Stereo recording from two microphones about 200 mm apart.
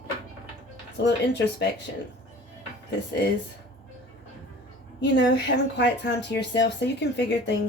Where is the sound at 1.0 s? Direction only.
60° left (ahead or behind).